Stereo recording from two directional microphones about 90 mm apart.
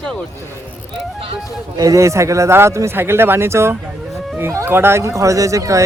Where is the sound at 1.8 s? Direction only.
35° right (ahead or behind).